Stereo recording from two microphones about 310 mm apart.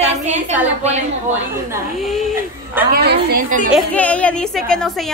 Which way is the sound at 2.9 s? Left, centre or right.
Right.